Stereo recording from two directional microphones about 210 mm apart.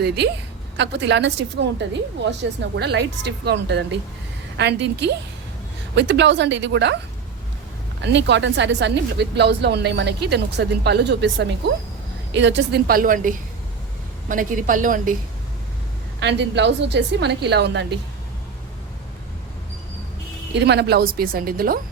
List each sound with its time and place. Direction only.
0.8 s a woman's voice: 55° right (ahead or behind)
8.0 s a woman's voice: 55° right (ahead or behind); by 15.1 s 40° right (ahead or behind)
16.2 s a woman's voice: 55° right (ahead or behind)
20.5 s speech: 55° right (ahead or behind)